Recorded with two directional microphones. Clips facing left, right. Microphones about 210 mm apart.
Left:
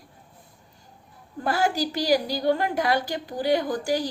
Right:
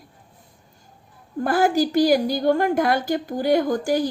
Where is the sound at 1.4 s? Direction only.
50° right (ahead or behind).